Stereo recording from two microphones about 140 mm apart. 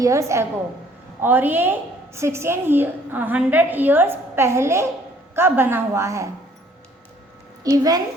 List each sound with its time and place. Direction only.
0.0 s a woman's voice: 20° right (ahead or behind)
7.6 s a woman's voice: 25° right (ahead or behind)